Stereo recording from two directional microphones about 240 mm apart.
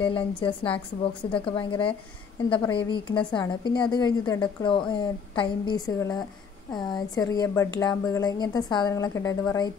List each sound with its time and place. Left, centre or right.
0.0 s a woman's voice: left